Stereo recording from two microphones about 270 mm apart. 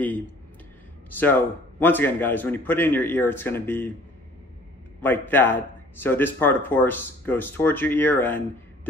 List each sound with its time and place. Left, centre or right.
1.1 s a man's voice: centre
5.0 s a man's voice: centre